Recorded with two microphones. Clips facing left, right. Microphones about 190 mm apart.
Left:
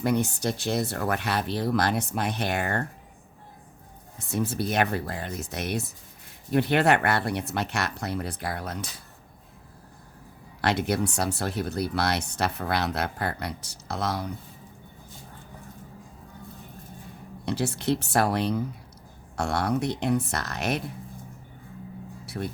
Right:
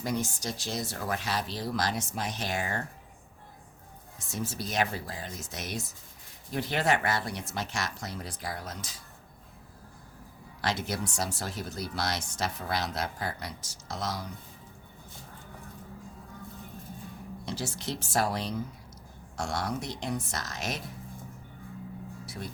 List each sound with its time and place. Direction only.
0.0 s speech: 60° left (ahead or behind)
4.2 s speech: 60° left (ahead or behind)
10.6 s speech: 60° left (ahead or behind)
17.4 s speech: 60° left (ahead or behind)
22.3 s speech: 60° left (ahead or behind)